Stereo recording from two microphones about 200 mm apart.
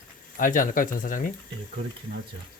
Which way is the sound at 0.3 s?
40° left (ahead or behind).